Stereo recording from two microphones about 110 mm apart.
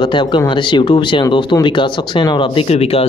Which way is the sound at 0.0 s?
45° left (ahead or behind).